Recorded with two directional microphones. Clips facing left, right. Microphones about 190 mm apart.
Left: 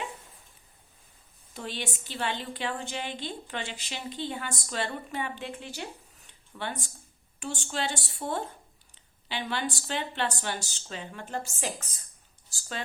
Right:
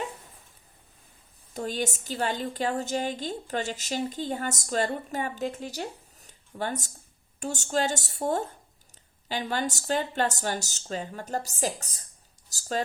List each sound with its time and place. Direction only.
1.5 s a woman's voice: 40° right (ahead or behind)